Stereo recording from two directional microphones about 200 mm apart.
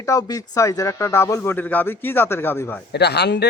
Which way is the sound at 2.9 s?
55° left (ahead or behind).